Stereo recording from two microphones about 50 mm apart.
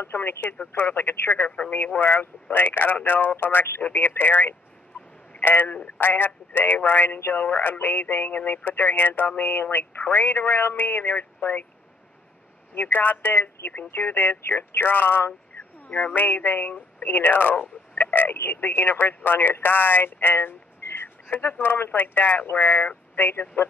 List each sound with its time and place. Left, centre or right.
0.0 s speech: left
4.9 s a sound: left
5.4 s speech: left
12.9 s speech: left
15.5 s a sound: left
15.9 s speech: left